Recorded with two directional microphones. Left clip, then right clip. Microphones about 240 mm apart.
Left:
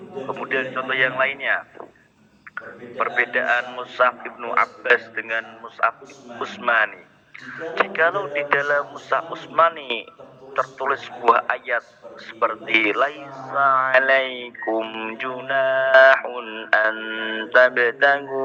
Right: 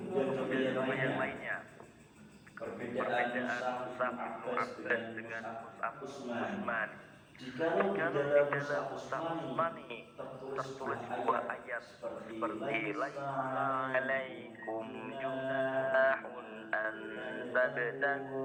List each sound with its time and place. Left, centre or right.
0.5 s speech: left
3.0 s speech: left
6.4 s speech: left